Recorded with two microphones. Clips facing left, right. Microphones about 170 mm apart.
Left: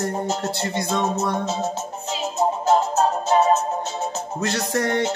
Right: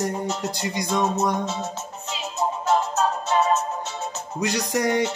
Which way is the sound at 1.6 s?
45° left (ahead or behind).